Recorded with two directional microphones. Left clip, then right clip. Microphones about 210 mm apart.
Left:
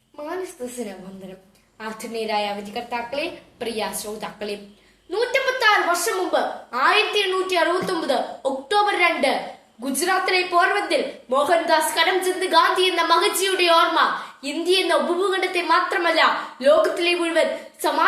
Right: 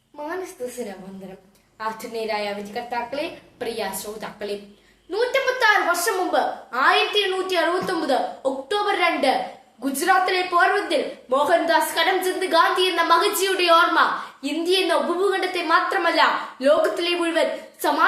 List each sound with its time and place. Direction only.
2.0 s a woman's voice: 15° right (ahead or behind)